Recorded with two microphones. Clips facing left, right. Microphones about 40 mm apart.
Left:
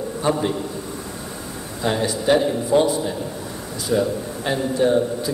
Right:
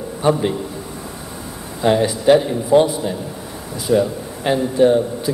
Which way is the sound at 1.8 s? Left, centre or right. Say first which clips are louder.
Right 6 dB; right.